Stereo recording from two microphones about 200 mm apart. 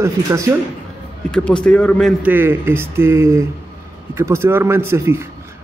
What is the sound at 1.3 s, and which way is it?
Speech, 5° left (ahead or behind).